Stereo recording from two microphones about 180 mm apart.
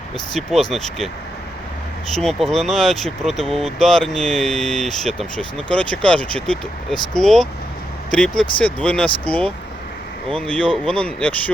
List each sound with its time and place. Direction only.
0.3 s speech: centre (ahead or behind)
2.1 s speech: centre (ahead or behind)
6.9 s speech: 25° left (ahead or behind)
7.2 s speech: centre (ahead or behind)